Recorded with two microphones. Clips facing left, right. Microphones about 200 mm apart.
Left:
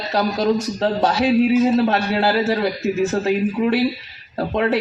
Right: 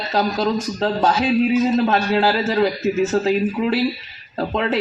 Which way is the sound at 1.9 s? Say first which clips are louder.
Right 1 dB; 55° left (ahead or behind).